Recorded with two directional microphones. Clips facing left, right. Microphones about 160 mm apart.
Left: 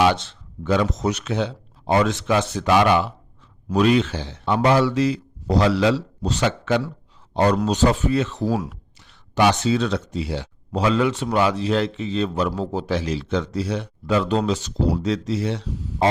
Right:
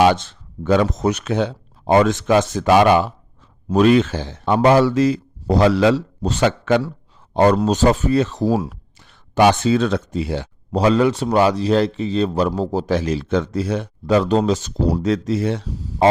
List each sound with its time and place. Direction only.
0.0 s a man's voice: 50° right (ahead or behind); by 8.7 s 30° right (ahead or behind)
9.3 s a man's voice: 50° right (ahead or behind)
10.7 s a man's voice: 40° right (ahead or behind)